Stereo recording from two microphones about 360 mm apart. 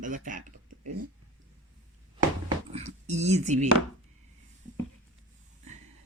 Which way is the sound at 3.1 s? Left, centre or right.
Centre.